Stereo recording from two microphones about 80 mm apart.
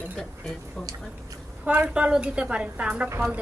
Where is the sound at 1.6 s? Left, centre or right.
Centre.